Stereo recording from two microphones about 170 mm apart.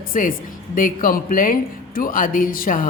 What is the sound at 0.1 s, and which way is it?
A woman's voice, 55° left (ahead or behind).